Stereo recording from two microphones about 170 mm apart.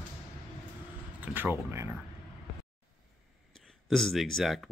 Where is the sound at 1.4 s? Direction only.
15° right (ahead or behind).